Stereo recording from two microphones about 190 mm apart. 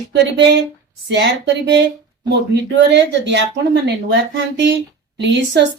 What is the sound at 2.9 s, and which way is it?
A woman's voice, 65° right (ahead or behind).